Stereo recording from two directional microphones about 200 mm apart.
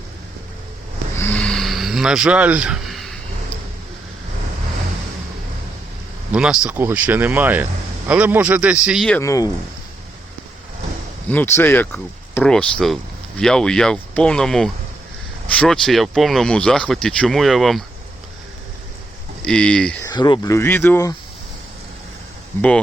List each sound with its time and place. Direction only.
1.1 s a sound: 10° left (ahead or behind)
6.3 s speech: 5° right (ahead or behind)
9.2 s speech: 15° left (ahead or behind)
11.3 s speech: 10° left (ahead or behind)
19.4 s speech: 5° left (ahead or behind)
20.1 s speech: 20° left (ahead or behind)